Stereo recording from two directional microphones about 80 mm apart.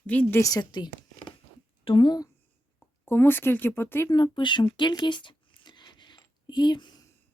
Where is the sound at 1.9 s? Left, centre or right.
Left.